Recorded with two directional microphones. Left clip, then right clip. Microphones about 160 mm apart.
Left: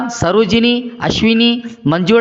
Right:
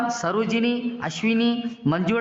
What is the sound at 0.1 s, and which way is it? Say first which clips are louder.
A man's voice: left 11 dB; 35° left (ahead or behind).